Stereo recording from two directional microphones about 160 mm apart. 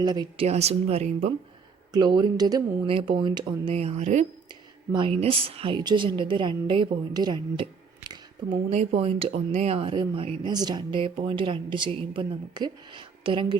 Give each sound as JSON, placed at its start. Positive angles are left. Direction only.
{"t": 0.0, "sound": "speech", "side_deg": -25}
{"t": 0.4, "sound": "speech", "side_deg": -40}
{"t": 1.9, "sound": "speech", "side_deg": -25}
{"t": 4.4, "sound": "a woman's voice", "side_deg": -30}
{"t": 8.7, "sound": "speech", "side_deg": -40}